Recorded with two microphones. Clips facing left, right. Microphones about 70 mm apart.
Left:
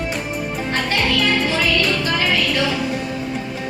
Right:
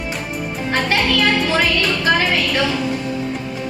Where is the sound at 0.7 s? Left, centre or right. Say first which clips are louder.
Right 3 dB; right.